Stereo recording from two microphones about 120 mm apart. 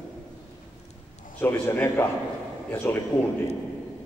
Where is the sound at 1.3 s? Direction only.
15° left (ahead or behind).